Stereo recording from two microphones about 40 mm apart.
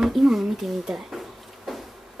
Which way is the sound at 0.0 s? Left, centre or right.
Centre.